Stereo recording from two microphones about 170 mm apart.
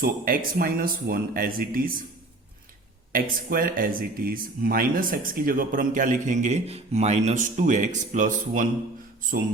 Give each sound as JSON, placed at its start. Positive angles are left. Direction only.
{"t": 0.0, "sound": "speech", "side_deg": -60}
{"t": 3.1, "sound": "speech", "side_deg": -55}